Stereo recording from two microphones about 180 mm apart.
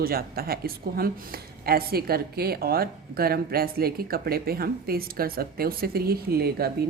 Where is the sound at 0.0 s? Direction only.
55° right (ahead or behind).